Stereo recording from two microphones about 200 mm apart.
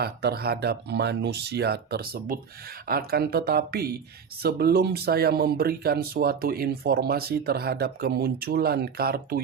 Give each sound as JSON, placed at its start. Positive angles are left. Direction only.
{"t": 0.0, "sound": "speech", "side_deg": -55}